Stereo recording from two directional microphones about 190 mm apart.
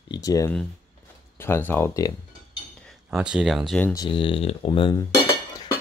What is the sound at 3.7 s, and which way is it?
Speech, 15° left (ahead or behind).